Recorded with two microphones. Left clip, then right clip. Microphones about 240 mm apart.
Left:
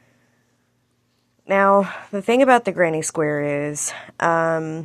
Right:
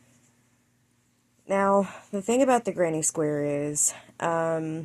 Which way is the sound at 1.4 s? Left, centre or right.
Centre.